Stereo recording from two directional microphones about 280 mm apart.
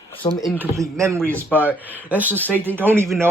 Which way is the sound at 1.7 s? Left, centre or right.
Centre.